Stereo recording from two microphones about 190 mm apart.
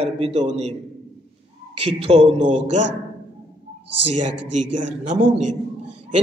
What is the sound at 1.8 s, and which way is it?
A man's voice, 35° right (ahead or behind).